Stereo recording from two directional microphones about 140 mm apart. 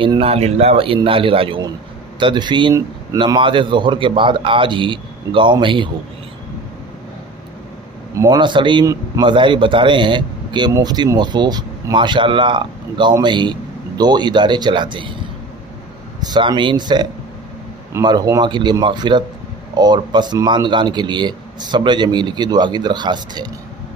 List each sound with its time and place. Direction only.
0.0 s speech: 40° right (ahead or behind)
8.1 s speech: 20° right (ahead or behind)
8.4 s speech: 35° right (ahead or behind)
16.2 s speech: 30° right (ahead or behind)